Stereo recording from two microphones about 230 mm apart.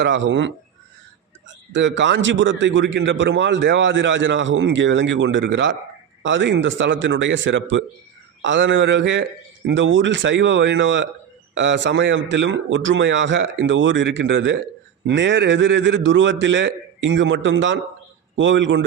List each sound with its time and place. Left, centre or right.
0.0 s a man's voice: right
1.7 s a man's voice: right